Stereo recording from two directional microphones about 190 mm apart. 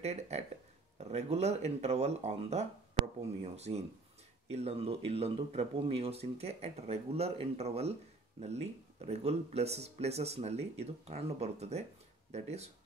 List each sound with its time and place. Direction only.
0.0 s speech: 35° right (ahead or behind)